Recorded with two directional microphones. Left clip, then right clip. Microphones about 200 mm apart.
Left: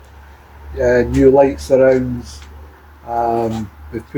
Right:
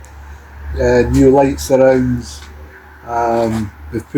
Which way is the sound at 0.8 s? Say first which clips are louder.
Right 1 dB; 20° right (ahead or behind).